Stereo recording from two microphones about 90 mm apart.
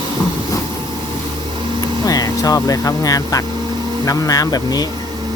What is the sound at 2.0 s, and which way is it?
Vehicle, 40° left (ahead or behind).